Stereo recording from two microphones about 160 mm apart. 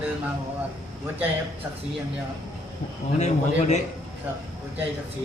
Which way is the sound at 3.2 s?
45° left (ahead or behind).